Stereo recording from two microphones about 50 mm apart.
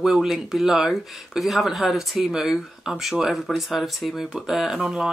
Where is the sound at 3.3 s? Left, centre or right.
Centre.